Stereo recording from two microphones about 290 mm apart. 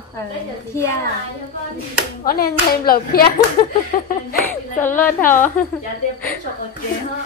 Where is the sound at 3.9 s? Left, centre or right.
Left.